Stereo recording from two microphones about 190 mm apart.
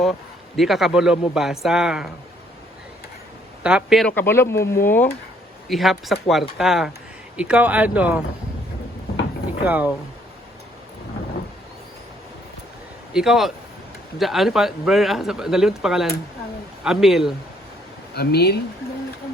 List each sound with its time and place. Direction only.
0.0 s speech: centre (ahead or behind)
3.6 s speech: 5° right (ahead or behind)
4.1 s speech: 10° left (ahead or behind)
5.6 s speech: centre (ahead or behind)
9.6 s speech: 10° right (ahead or behind)
13.1 s speech: 5° right (ahead or behind)
18.1 s speech: 55° left (ahead or behind)